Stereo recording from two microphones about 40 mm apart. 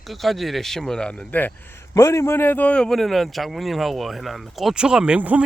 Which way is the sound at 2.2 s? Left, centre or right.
Left.